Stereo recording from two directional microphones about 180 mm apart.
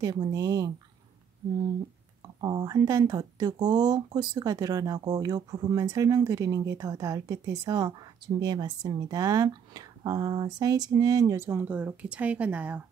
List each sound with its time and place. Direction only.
0.0 s speech: 20° right (ahead or behind)
2.4 s speech: 25° right (ahead or behind); by 12.8 s 10° right (ahead or behind)